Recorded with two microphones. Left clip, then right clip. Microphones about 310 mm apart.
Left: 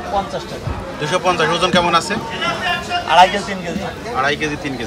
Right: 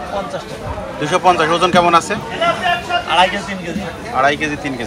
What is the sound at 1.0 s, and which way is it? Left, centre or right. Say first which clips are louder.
Speech: right 3 dB; centre.